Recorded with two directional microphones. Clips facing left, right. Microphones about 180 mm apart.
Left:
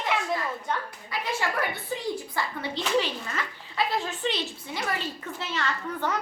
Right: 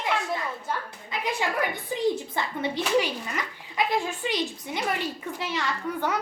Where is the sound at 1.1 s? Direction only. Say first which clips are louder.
Right 1 dB; 15° right (ahead or behind).